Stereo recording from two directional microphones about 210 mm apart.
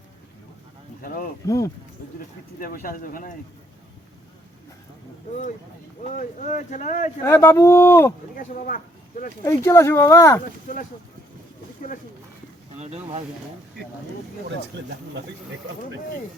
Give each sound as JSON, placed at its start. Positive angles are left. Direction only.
{"t": 1.0, "sound": "speech", "side_deg": 40}
{"t": 1.5, "sound": "speech", "side_deg": 15}
{"t": 2.6, "sound": "speech", "side_deg": 40}
{"t": 6.1, "sound": "speech", "side_deg": 35}
{"t": 7.3, "sound": "speech", "side_deg": 10}
{"t": 8.4, "sound": "speech", "side_deg": 40}
{"t": 9.4, "sound": "speech", "side_deg": 15}
{"t": 10.4, "sound": "speech", "side_deg": 40}
{"t": 12.8, "sound": "speech", "side_deg": -30}